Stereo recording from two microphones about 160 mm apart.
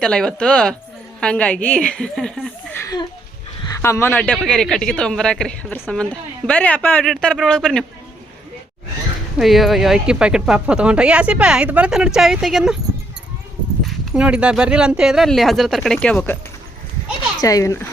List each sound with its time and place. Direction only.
0.0 s a woman's voice: 5° left (ahead or behind)
3.8 s speech: 15° left (ahead or behind)
9.4 s speech: centre (ahead or behind)
13.8 s speech: 5° right (ahead or behind); by 16.4 s 10° left (ahead or behind)
17.4 s speech: 20° left (ahead or behind)